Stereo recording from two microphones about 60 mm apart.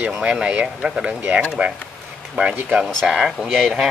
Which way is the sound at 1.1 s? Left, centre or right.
Right.